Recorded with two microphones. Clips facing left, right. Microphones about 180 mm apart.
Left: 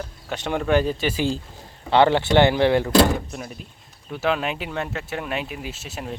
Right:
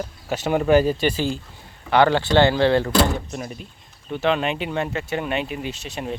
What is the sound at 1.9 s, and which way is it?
Speech, 20° left (ahead or behind).